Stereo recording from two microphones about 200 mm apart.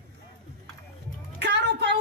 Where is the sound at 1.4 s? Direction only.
60° right (ahead or behind).